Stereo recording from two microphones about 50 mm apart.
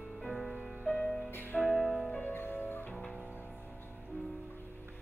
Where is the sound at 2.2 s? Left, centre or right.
Left.